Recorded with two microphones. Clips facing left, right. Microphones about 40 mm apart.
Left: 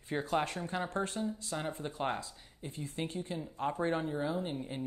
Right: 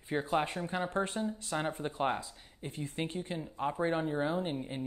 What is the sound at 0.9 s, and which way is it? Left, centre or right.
Speech, right.